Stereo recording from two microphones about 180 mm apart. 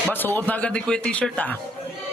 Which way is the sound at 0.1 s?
10° left (ahead or behind).